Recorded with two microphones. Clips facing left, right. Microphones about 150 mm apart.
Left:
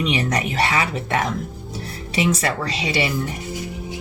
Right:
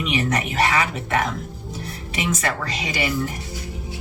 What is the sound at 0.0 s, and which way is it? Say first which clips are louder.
Speech: left 1 dB; 35° left (ahead or behind).